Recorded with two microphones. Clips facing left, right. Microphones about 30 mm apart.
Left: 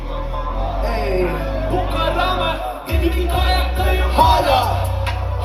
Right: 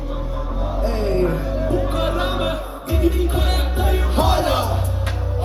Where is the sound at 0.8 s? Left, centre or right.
Left.